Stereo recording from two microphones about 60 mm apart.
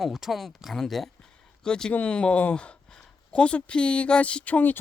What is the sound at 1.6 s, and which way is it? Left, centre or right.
Speech, centre.